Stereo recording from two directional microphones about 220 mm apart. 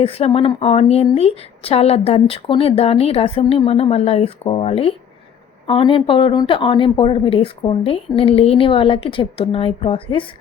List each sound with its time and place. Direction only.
0.0 s speech: 25° left (ahead or behind)